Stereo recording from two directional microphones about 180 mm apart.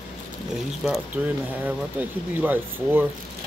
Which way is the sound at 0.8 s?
Centre (ahead or behind).